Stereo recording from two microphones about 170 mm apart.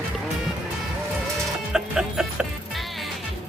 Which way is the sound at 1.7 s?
5° right (ahead or behind).